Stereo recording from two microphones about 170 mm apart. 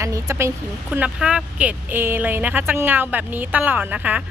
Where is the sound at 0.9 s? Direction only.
5° right (ahead or behind).